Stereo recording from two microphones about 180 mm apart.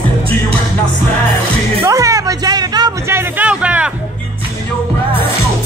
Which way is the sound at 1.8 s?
15° right (ahead or behind).